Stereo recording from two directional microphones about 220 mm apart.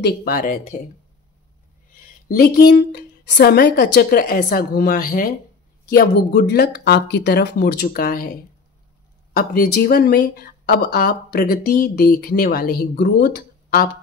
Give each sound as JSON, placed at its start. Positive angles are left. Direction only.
{"t": 0.0, "sound": "speech", "side_deg": 45}
{"t": 2.2, "sound": "speech", "side_deg": 40}
{"t": 9.3, "sound": "speech", "side_deg": 40}